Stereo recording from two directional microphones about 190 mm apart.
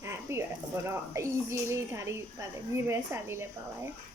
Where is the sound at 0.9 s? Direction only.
15° right (ahead or behind).